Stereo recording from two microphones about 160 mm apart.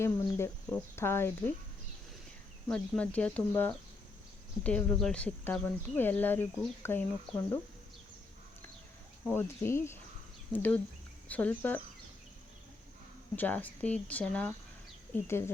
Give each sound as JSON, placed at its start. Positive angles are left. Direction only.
{"t": 0.0, "sound": "speech", "side_deg": 15}
{"t": 2.6, "sound": "speech", "side_deg": 5}
{"t": 9.3, "sound": "speech", "side_deg": 15}
{"t": 13.3, "sound": "speech", "side_deg": 10}